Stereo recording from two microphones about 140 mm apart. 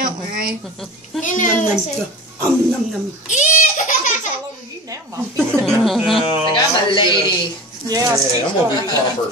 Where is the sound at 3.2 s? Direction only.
60° left (ahead or behind).